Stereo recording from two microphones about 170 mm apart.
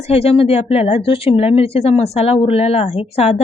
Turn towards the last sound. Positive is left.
turn(degrees=35)  # may be behind; listen again after turning